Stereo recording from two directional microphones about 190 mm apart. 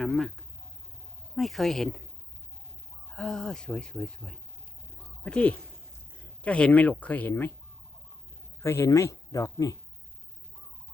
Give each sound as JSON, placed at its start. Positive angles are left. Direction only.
{"t": 0.0, "sound": "a sound", "side_deg": 0}
{"t": 1.4, "sound": "a woman's voice", "side_deg": 0}
{"t": 3.1, "sound": "a woman's voice", "side_deg": 5}
{"t": 8.6, "sound": "speech", "side_deg": 15}